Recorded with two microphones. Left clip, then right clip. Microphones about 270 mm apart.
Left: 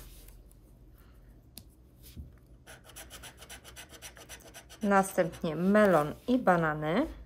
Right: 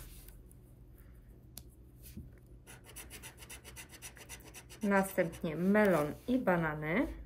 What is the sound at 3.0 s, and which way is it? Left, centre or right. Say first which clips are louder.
Rub: left 2 dB; centre.